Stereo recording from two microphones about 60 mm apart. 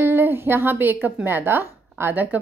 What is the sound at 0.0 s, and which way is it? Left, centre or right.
Speech, right.